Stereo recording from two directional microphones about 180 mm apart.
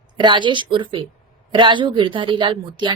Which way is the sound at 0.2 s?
25° right (ahead or behind).